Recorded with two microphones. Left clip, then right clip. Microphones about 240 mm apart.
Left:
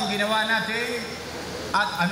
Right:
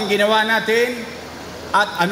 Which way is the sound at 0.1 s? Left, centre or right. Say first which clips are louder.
Right 9 dB; right.